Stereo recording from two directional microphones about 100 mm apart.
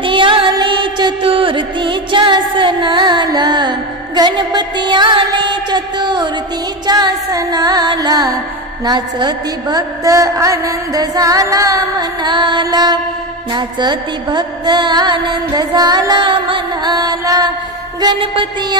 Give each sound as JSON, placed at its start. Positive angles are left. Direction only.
{"t": 0.0, "sound": "music", "side_deg": -55}
{"t": 1.2, "sound": "music", "side_deg": -65}
{"t": 6.9, "sound": "a sound", "side_deg": -40}
{"t": 13.5, "sound": "music", "side_deg": -45}
{"t": 18.0, "sound": "music", "side_deg": -60}